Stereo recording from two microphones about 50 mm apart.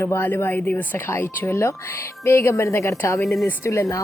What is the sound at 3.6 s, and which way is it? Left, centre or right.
Speech, left.